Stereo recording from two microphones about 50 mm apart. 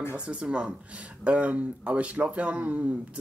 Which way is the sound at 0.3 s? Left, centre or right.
Right.